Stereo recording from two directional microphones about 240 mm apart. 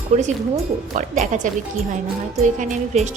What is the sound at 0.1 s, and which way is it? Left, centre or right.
Speech, right.